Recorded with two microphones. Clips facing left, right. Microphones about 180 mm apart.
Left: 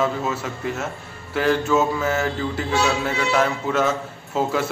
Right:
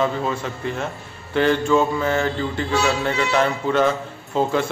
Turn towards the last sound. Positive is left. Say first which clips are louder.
# right 2 dB
turn(degrees=5)  # may be behind; listen again after turning